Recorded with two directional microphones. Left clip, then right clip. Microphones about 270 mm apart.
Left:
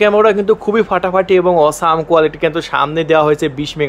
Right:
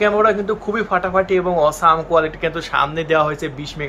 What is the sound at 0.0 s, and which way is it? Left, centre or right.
Speech, left.